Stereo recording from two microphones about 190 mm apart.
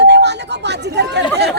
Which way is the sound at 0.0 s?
65° right (ahead or behind).